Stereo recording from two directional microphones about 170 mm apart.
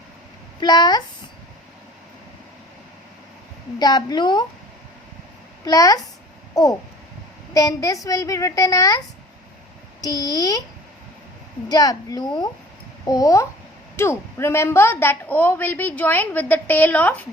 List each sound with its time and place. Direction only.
0.6 s a woman's voice: 25° left (ahead or behind)
3.8 s a woman's voice: 25° left (ahead or behind)
5.6 s a woman's voice: 20° left (ahead or behind)
6.5 s a sound: 20° left (ahead or behind)
7.5 s a woman's voice: 20° left (ahead or behind)
10.0 s a woman's voice: 20° left (ahead or behind)
11.7 s a woman's voice: 20° left (ahead or behind)